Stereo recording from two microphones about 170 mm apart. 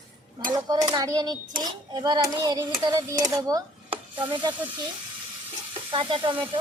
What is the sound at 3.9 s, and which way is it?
Sizzle, 30° right (ahead or behind).